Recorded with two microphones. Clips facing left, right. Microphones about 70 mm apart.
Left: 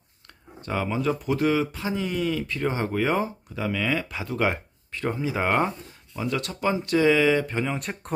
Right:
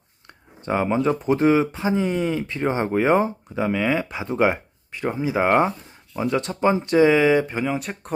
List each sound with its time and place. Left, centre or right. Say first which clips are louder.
0.3 s speech: right 7 dB; right
7.6 s speech: right 4 dB; centre